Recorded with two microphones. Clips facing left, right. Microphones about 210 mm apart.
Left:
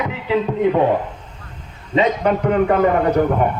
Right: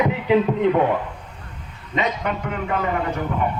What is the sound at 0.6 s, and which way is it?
Speech, 15° left (ahead or behind).